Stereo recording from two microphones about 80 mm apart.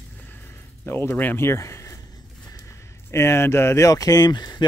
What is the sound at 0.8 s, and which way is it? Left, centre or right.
Speech, left.